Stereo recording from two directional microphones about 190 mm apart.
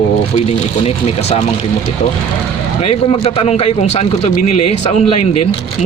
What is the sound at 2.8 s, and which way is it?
A man's voice, 35° left (ahead or behind).